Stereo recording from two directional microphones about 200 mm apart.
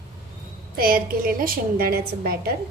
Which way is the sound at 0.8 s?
45° right (ahead or behind).